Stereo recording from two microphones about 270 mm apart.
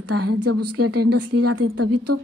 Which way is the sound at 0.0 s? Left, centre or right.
Right.